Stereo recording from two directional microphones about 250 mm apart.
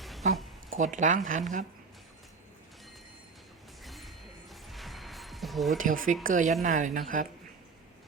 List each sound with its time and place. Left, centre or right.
0.0 s a sound: centre
0.8 s speech: right
3.8 s music: centre
5.7 s speech: right